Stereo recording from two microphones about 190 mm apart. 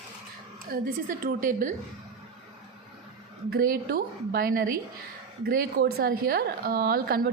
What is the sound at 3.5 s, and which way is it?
A woman's voice, 50° right (ahead or behind).